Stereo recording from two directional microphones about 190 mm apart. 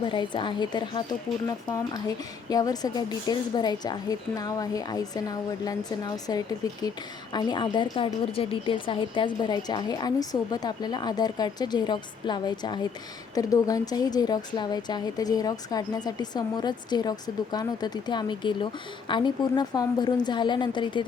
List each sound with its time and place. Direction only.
0.0 s speech: 25° left (ahead or behind)